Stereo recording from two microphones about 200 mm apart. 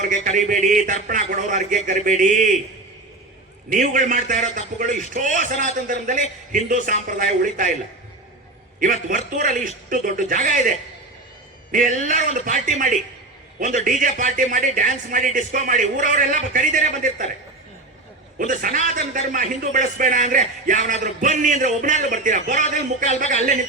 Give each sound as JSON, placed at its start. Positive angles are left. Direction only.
{"t": 0.0, "sound": "speech", "side_deg": -40}
{"t": 3.7, "sound": "speech", "side_deg": -40}
{"t": 8.8, "sound": "speech", "side_deg": -40}
{"t": 11.7, "sound": "speech", "side_deg": -40}
{"t": 18.3, "sound": "speech", "side_deg": -40}